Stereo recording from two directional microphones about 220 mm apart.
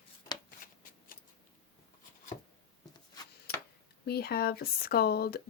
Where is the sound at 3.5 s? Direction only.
45° left (ahead or behind).